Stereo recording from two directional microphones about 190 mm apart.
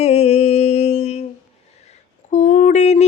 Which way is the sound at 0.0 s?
35° left (ahead or behind).